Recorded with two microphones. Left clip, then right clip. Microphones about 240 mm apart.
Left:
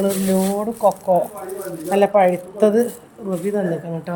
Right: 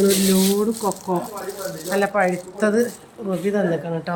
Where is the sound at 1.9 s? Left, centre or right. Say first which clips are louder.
Left 5 dB; centre.